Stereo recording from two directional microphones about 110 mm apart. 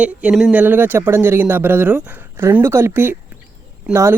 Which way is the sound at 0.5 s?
15° right (ahead or behind).